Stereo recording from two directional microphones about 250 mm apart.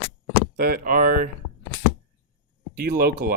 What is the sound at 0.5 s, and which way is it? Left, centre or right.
Speech, right.